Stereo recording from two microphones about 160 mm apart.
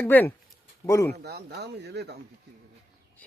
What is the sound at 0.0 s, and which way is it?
Speech, 10° left (ahead or behind).